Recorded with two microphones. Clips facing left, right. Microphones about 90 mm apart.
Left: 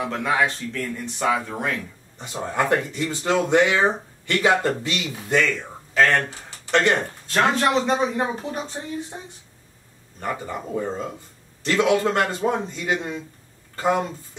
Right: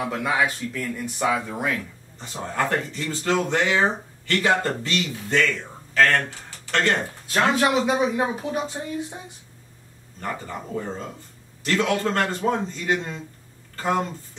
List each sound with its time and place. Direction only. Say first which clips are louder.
0.0 s speech: left 1 dB; 5° right (ahead or behind)
2.1 s speech: left 2 dB; 15° left (ahead or behind)
6.7 s speech: left 3 dB; 20° left (ahead or behind)
7.2 s speech: even; 5° right (ahead or behind)
10.2 s speech: left 3 dB; 15° left (ahead or behind)